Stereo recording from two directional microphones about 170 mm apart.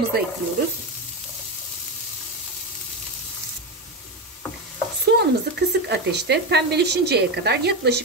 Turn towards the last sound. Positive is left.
turn(degrees=-70)  # may be behind; listen again after turning